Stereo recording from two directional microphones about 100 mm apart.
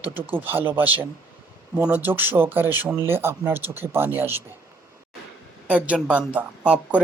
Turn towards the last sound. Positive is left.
turn(degrees=-15)  # may be behind; listen again after turning